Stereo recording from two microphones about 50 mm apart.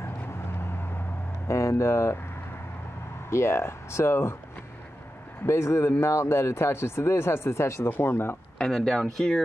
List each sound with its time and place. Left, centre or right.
1.5 s speech: left
3.3 s speech: left
5.5 s speech: left
8.0 s speech: left
8.5 s speech: centre